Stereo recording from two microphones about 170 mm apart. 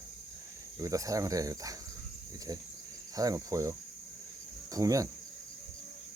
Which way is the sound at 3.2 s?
20° right (ahead or behind).